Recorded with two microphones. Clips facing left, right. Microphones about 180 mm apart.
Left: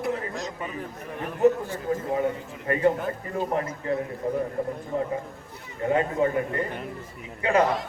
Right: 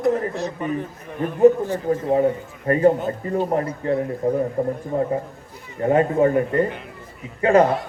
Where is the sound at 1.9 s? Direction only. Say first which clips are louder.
Right 6 dB; 35° right (ahead or behind).